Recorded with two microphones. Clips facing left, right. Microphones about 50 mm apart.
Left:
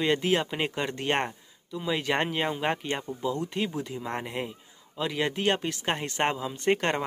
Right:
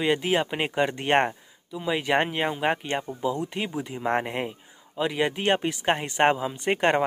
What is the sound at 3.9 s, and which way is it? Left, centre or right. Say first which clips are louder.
Speech: right 6 dB; right.